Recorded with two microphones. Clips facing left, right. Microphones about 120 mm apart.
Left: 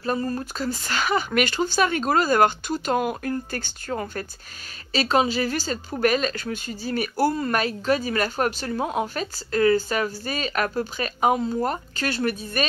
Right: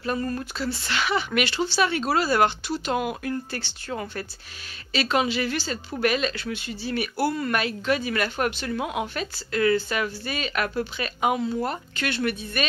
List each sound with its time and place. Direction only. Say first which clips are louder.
0.0 s a woman's voice: left 2 dB; 30° left (ahead or behind)
0.6 s a woman's voice: left 1 dB; 45° left (ahead or behind)